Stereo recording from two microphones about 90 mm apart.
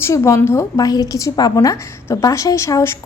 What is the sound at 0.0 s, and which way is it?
Speech, 30° left (ahead or behind).